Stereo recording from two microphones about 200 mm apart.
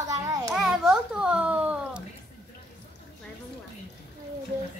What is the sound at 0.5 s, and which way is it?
A child's voice, 5° right (ahead or behind).